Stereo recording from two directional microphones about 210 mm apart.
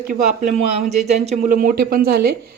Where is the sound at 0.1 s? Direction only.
35° right (ahead or behind).